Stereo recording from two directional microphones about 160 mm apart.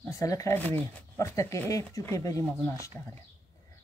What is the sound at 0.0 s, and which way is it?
Speech, 20° left (ahead or behind).